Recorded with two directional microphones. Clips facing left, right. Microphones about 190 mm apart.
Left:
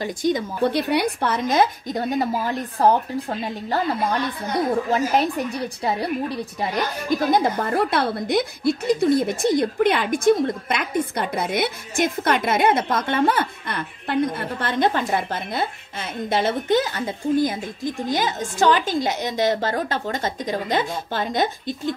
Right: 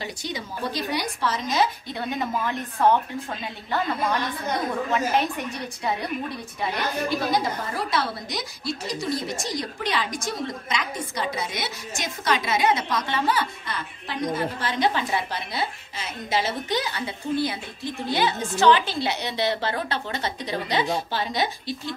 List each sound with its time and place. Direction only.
0.0 s a woman's voice: 50° left (ahead or behind)
7.3 s a woman's voice: 55° left (ahead or behind)